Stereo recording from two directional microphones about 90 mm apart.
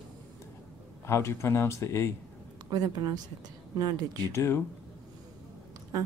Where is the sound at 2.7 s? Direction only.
50° right (ahead or behind).